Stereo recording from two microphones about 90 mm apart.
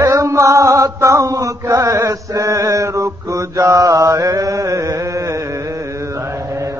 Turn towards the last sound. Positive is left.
turn(degrees=-35)  # may be behind; listen again after turning